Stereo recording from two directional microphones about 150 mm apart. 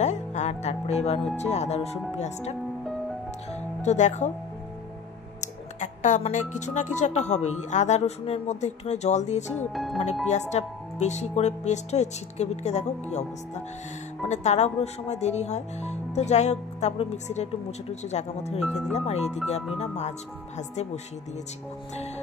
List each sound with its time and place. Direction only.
0.0 s music: 50° left (ahead or behind)
1.3 s speech: 45° left (ahead or behind)
3.8 s speech: 50° left (ahead or behind)
5.4 s speech: 55° left (ahead or behind)
9.7 s speech: centre (ahead or behind)
10.5 s speech: 50° left (ahead or behind)
14.2 s speech: 50° left (ahead or behind)
18.6 s speech: centre (ahead or behind)
18.9 s speech: 45° left (ahead or behind)